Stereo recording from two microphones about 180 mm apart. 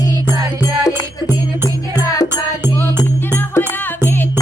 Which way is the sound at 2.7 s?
10° left (ahead or behind).